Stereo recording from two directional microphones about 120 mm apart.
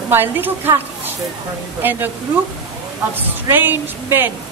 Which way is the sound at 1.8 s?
15° right (ahead or behind).